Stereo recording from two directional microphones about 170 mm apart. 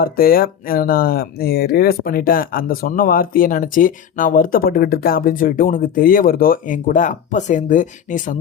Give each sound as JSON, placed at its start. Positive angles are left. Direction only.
{"t": 0.0, "sound": "speech", "side_deg": 60}